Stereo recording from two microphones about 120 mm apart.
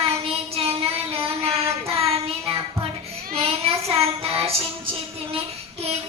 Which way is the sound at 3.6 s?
55° right (ahead or behind).